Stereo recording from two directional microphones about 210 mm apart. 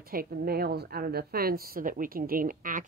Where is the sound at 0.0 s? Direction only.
45° right (ahead or behind).